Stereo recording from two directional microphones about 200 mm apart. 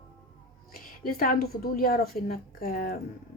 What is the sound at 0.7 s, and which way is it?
A woman's voice, 50° left (ahead or behind).